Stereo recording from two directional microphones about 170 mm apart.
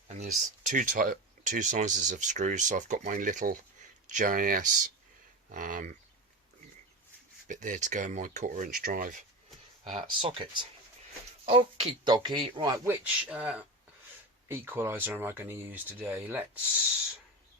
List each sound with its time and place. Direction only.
0.1 s speech: 45° right (ahead or behind)
7.4 s speech: 50° right (ahead or behind)
9.9 s speech: 35° right (ahead or behind); by 16.4 s 10° right (ahead or behind)